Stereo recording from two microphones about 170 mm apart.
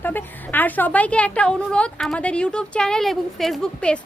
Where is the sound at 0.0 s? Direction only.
10° left (ahead or behind).